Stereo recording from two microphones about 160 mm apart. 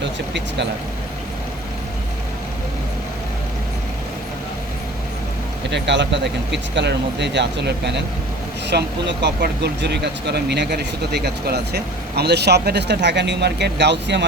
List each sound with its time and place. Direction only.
0.0 s speech: 90° right
5.7 s speech: 90° right